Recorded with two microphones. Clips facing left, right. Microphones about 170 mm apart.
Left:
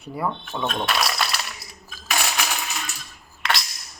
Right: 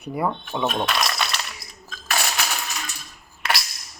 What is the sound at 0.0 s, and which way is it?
Speech, 15° right (ahead or behind).